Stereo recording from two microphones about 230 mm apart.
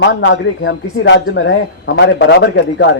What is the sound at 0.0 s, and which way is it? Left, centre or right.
A man's voice, left.